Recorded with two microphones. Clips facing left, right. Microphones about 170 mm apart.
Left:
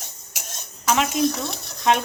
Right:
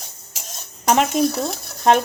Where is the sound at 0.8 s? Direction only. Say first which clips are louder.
Right 3 dB; 45° right (ahead or behind).